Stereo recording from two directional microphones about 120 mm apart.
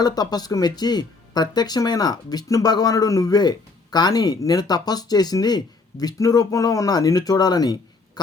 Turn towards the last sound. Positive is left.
turn(degrees=35)  # may be behind; listen again after turning